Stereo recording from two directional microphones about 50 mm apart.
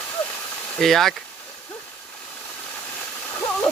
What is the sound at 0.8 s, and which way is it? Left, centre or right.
Speech, centre.